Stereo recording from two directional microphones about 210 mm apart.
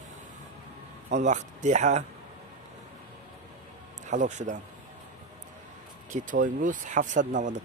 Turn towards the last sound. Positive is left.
turn(degrees=-35)  # may be behind; listen again after turning